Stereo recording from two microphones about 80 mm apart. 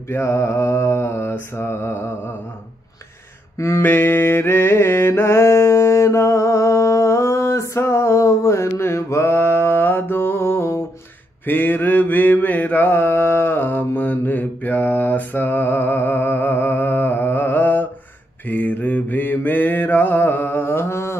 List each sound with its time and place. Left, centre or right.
0.1 s mantra: left
3.5 s a sound: left
3.9 s mantra: left